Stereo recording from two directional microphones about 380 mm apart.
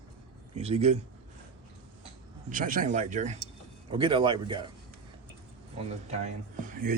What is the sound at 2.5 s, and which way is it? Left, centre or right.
Speech, right.